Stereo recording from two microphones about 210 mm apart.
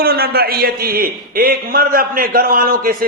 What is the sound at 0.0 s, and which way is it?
A man's voice, 45° right (ahead or behind).